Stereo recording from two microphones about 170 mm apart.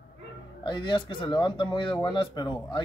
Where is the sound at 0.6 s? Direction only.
25° left (ahead or behind).